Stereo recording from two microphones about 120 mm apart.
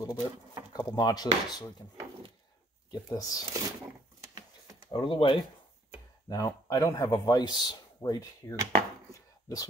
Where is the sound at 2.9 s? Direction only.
35° left (ahead or behind).